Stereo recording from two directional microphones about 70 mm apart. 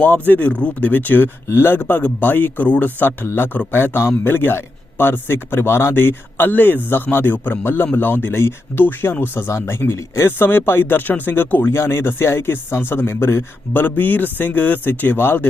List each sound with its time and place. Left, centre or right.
0.0 s speech: left